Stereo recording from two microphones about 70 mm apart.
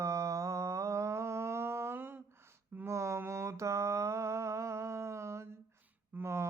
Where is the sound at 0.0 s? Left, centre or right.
Right.